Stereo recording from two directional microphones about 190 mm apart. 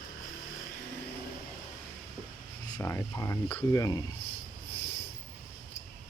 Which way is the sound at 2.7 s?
15° left (ahead or behind).